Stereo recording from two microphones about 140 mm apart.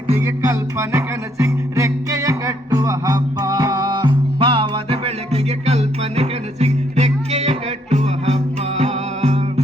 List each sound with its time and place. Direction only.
0.1 s music: 20° right (ahead or behind); by 9.4 s 50° right (ahead or behind)